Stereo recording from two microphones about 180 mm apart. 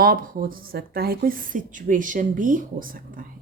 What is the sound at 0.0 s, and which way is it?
A woman's voice, 55° right (ahead or behind).